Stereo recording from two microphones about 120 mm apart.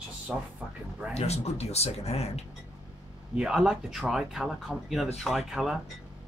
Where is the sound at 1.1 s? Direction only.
60° left (ahead or behind).